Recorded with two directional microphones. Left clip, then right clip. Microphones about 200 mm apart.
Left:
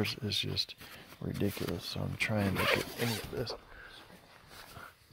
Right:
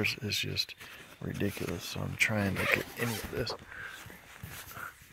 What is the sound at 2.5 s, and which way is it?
Speech, 50° left (ahead or behind).